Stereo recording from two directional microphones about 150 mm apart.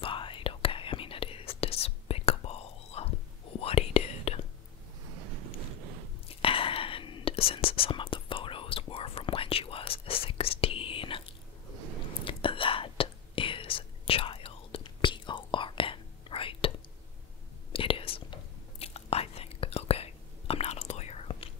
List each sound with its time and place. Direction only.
0.0 s whispering: 35° left (ahead or behind)
6.4 s whispering: 35° left (ahead or behind)
17.7 s whispering: 35° left (ahead or behind)